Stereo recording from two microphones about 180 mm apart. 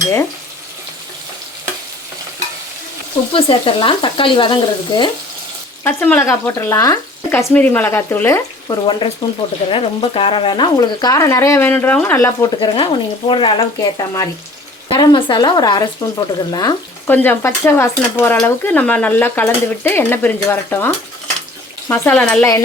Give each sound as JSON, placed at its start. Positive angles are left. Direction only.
{"t": 3.3, "sound": "speech", "side_deg": 30}
{"t": 5.8, "sound": "speech", "side_deg": 15}
{"t": 12.5, "sound": "speech", "side_deg": 30}
{"t": 14.8, "sound": "speech", "side_deg": 25}
{"t": 17.1, "sound": "speech", "side_deg": 10}